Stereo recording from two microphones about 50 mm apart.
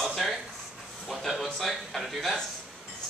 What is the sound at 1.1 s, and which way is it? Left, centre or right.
Speech, centre.